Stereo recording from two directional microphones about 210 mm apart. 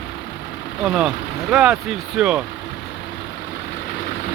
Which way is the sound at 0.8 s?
5° right (ahead or behind).